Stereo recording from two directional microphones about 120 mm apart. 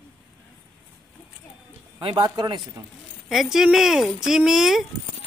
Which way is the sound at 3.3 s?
5° right (ahead or behind).